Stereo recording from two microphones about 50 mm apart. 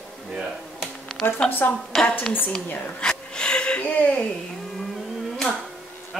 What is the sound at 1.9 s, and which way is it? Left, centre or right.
Speech, centre.